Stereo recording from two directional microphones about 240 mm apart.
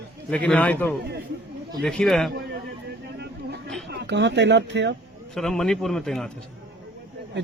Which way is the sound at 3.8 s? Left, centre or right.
Right.